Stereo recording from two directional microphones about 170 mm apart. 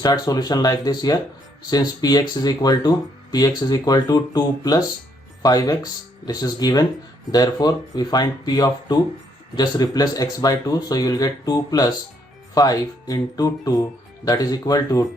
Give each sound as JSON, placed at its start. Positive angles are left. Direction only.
{"t": 0.0, "sound": "speech", "side_deg": 25}